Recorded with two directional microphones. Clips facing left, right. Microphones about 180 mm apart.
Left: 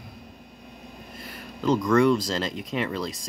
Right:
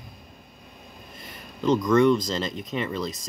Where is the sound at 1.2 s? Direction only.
10° left (ahead or behind).